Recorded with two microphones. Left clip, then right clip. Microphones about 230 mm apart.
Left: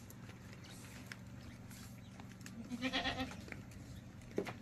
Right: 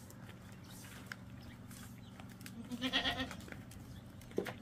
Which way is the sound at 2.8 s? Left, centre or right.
Centre.